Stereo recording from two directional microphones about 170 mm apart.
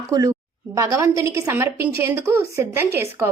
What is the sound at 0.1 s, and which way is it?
A woman's voice, 20° right (ahead or behind).